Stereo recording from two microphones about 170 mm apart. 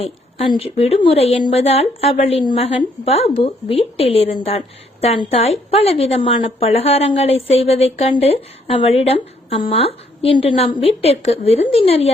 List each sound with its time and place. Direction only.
0.5 s a woman's voice: 35° left (ahead or behind)